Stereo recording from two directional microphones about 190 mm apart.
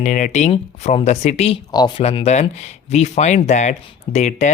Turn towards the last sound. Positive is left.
turn(degrees=40)  # may be behind; listen again after turning